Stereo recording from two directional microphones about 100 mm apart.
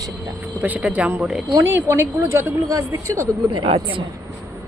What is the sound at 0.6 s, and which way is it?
A woman's voice, 15° right (ahead or behind).